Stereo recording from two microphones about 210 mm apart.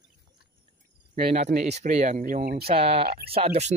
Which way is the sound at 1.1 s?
30° right (ahead or behind).